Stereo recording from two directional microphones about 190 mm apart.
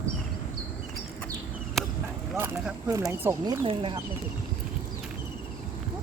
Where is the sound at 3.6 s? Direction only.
30° right (ahead or behind).